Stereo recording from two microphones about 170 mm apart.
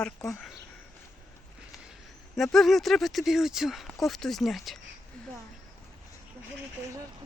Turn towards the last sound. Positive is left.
turn(degrees=5)  # may be behind; listen again after turning